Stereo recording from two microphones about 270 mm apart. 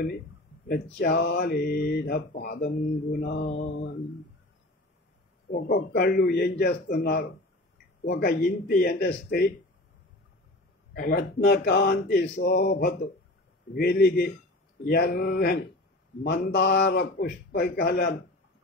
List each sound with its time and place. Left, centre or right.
0.7 s speech: left
5.5 s speech: left
10.9 s speech: left